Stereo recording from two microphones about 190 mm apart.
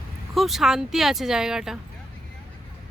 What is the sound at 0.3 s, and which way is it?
Speech, centre (ahead or behind).